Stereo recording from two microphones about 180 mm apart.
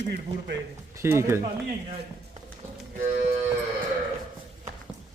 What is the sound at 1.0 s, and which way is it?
Speech, 15° right (ahead or behind).